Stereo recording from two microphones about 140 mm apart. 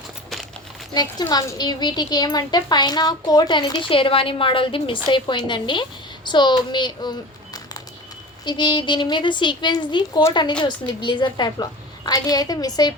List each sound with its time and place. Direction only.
0.9 s a child's voice: 30° left (ahead or behind)